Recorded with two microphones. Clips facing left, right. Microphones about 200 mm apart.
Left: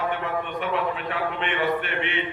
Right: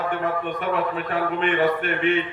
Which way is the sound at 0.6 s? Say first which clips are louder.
Right 2 dB; 45° right (ahead or behind).